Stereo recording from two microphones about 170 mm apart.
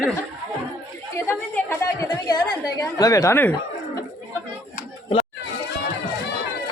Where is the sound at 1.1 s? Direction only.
15° left (ahead or behind).